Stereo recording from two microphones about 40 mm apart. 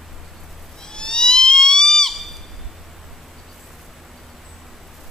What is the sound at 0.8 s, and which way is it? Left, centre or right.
Owl, centre.